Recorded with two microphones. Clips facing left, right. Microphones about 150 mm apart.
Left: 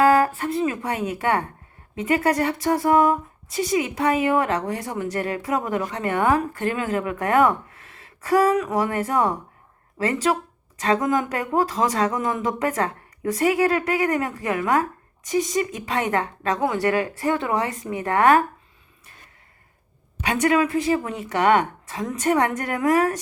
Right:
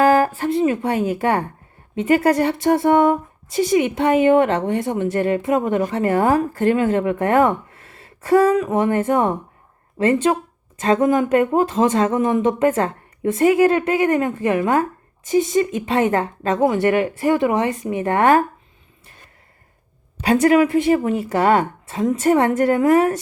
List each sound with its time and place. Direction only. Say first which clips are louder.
0.1 s a woman's voice: right 3 dB; 25° right (ahead or behind)
20.2 s a woman's voice: right 6 dB; 30° right (ahead or behind)